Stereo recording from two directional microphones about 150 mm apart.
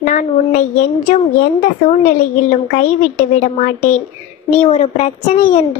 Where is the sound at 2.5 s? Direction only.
60° left (ahead or behind).